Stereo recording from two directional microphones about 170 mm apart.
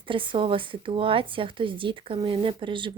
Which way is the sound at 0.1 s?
30° right (ahead or behind).